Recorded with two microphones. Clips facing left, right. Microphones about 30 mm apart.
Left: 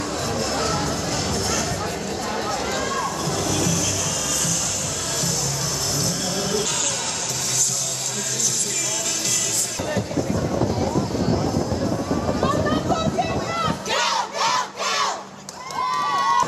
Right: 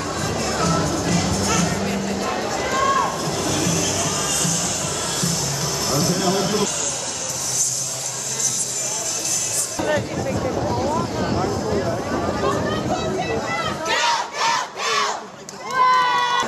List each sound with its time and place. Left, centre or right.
1.9 s music: right
3.6 s music: centre
5.9 s music: centre
13.0 s battle cry: centre
15.8 s crowd: right